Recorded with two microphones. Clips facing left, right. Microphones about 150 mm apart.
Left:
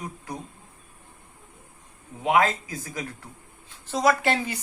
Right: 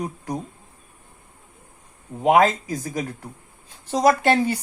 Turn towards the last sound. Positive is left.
turn(degrees=-40)  # may be behind; listen again after turning